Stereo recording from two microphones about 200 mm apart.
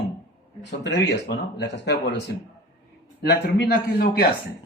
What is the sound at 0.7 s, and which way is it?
Speech, 60° left (ahead or behind).